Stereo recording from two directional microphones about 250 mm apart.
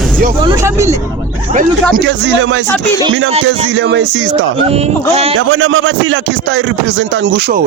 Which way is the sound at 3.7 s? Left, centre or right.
Right.